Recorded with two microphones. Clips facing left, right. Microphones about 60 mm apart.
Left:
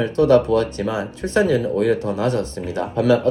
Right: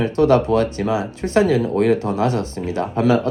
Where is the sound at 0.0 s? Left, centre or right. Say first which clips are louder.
Even; right.